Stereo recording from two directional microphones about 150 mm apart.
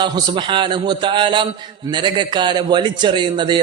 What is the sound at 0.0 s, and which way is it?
A man's voice, 30° right (ahead or behind).